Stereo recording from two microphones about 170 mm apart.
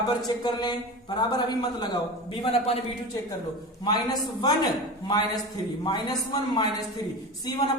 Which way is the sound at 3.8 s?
25° left (ahead or behind).